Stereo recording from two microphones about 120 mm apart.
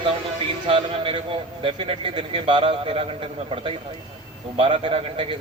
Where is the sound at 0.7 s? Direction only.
50° right (ahead or behind).